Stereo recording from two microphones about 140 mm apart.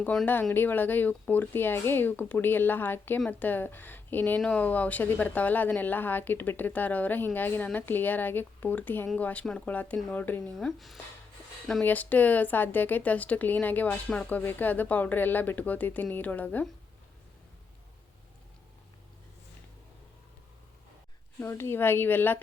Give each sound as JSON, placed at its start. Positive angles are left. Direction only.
{"t": 0.0, "sound": "speech", "side_deg": 10}
{"t": 10.7, "sound": "speech", "side_deg": 0}
{"t": 11.8, "sound": "speech", "side_deg": 10}
{"t": 21.3, "sound": "speech", "side_deg": 20}